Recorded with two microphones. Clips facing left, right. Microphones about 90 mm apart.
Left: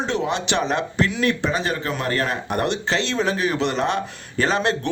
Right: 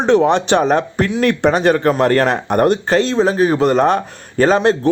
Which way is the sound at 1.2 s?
60° right (ahead or behind).